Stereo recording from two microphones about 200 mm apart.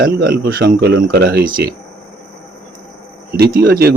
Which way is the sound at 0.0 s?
55° right (ahead or behind).